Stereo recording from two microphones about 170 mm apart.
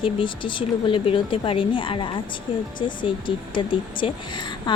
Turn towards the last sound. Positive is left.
turn(degrees=30)  # may be behind; listen again after turning